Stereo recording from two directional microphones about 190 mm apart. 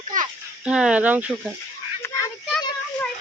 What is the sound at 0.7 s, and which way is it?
Speech, 5° right (ahead or behind).